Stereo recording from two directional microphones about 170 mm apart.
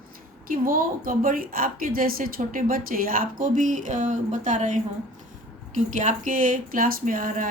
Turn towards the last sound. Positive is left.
turn(degrees=-55)  # may be behind; listen again after turning